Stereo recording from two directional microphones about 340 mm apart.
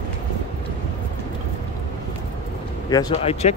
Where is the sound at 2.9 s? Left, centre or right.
Centre.